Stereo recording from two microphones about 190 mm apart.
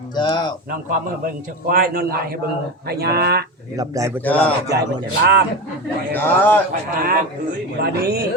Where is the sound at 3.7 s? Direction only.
20° right (ahead or behind).